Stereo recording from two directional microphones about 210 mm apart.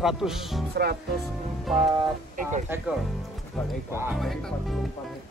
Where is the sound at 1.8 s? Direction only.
20° right (ahead or behind).